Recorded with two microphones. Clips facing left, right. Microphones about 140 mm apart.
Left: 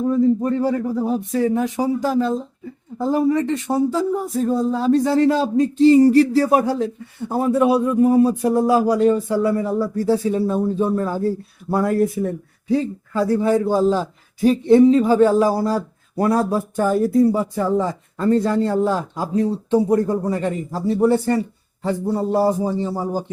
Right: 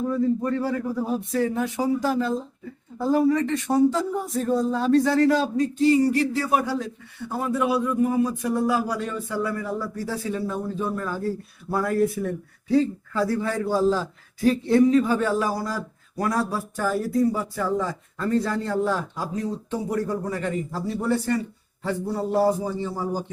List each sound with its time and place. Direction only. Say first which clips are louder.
0.1 s a man's voice: left 7 dB; 25° left (ahead or behind)
3.8 s a man's voice: even; 5° left (ahead or behind); by 6.0 s 25° left (ahead or behind)
6.0 s a man's voice: left 9 dB; 35° left (ahead or behind)